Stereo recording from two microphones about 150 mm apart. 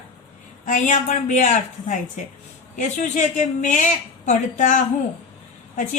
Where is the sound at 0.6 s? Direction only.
55° left (ahead or behind).